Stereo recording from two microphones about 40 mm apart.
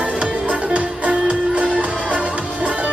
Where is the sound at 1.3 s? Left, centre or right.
Right.